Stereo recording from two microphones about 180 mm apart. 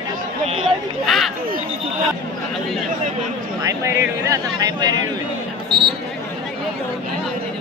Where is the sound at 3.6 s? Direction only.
15° right (ahead or behind).